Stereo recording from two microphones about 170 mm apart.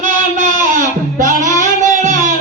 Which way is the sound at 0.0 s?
50° right (ahead or behind).